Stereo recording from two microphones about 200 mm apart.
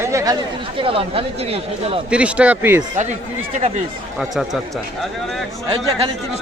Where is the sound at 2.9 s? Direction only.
35° right (ahead or behind).